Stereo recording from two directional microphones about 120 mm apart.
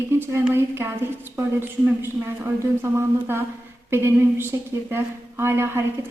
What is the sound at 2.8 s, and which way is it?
A woman's voice, 20° right (ahead or behind).